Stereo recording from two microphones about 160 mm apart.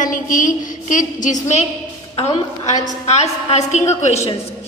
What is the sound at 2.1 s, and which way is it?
A woman's voice, 40° left (ahead or behind).